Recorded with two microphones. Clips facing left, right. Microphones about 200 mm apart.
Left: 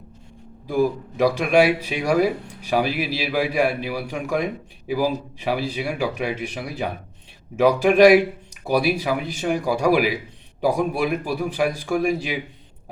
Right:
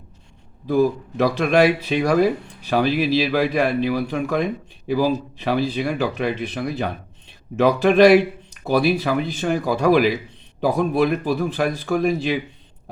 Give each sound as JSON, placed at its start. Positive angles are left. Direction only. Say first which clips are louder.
{"t": 0.7, "sound": "speech", "louder": "right 3 dB", "side_deg": 10}